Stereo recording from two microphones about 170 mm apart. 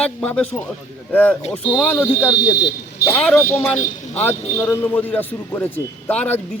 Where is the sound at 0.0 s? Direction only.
5° left (ahead or behind).